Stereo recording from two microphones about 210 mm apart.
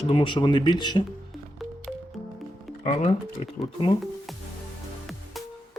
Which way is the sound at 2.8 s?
30° left (ahead or behind).